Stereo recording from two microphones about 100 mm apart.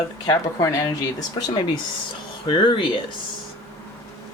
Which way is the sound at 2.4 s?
55° left (ahead or behind).